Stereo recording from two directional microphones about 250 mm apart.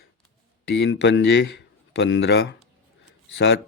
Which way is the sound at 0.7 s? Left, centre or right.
Left.